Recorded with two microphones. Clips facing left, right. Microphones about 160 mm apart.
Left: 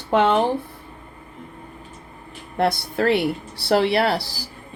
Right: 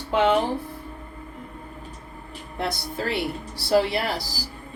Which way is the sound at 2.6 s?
65° left (ahead or behind).